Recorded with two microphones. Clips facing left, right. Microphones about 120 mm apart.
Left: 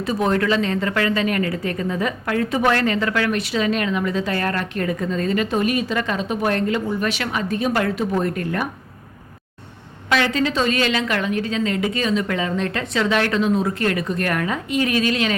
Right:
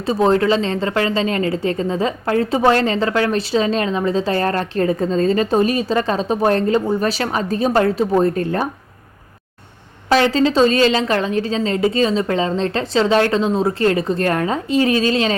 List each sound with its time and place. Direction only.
0.0 s a woman's voice: 30° right (ahead or behind)
10.1 s a woman's voice: 30° right (ahead or behind)